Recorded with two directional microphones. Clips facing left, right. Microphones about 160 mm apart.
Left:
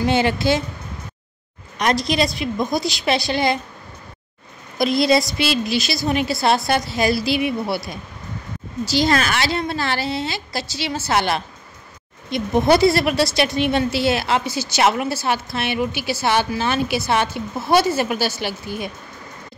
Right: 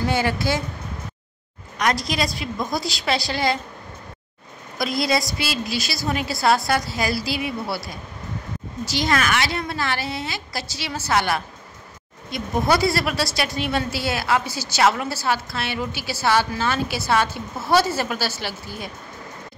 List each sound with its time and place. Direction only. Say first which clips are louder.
0.0 s a woman's voice: left 4 dB; 25° left (ahead or behind)
1.8 s a woman's voice: left 4 dB; 25° left (ahead or behind)
4.7 s a woman's voice: left 6 dB; 25° left (ahead or behind)
8.8 s a woman's voice: left 4 dB; 30° left (ahead or behind)